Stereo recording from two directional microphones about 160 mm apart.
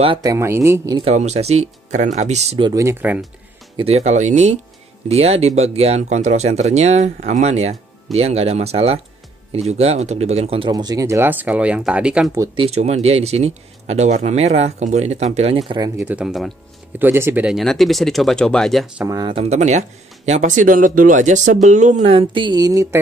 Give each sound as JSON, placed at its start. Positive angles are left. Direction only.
{"t": 0.2, "sound": "speech", "side_deg": -20}
{"t": 1.0, "sound": "speech", "side_deg": -45}
{"t": 2.6, "sound": "speech", "side_deg": -20}
{"t": 3.7, "sound": "speech", "side_deg": -40}
{"t": 10.7, "sound": "speech", "side_deg": -25}
{"t": 12.5, "sound": "speech", "side_deg": -40}
{"t": 15.8, "sound": "speech", "side_deg": -15}
{"t": 17.0, "sound": "speech", "side_deg": -15}
{"t": 19.0, "sound": "speech", "side_deg": -25}
{"t": 19.3, "sound": "speech", "side_deg": -45}